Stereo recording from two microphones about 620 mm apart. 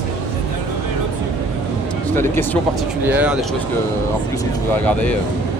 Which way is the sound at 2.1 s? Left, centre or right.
Centre.